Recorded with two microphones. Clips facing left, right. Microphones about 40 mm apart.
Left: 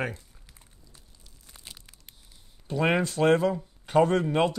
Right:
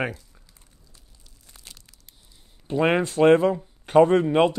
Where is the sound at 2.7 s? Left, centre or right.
Centre.